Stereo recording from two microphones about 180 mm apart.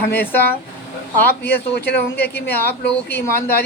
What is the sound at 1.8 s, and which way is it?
Speech, 65° left (ahead or behind).